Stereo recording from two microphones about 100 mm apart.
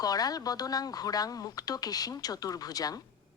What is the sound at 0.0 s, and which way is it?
Speech, 40° left (ahead or behind).